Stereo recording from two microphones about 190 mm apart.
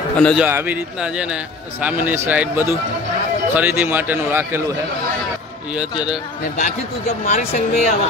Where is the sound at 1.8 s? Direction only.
10° right (ahead or behind).